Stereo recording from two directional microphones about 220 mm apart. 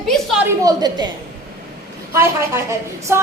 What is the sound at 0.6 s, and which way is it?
Speech, 20° right (ahead or behind).